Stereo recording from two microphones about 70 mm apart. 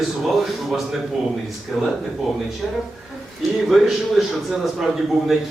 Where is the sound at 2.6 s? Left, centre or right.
Centre.